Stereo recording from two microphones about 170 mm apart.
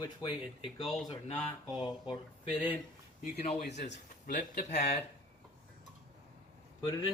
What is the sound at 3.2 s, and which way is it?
Speech, 40° left (ahead or behind).